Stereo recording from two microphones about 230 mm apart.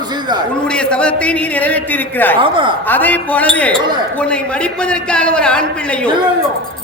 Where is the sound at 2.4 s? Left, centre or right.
Right.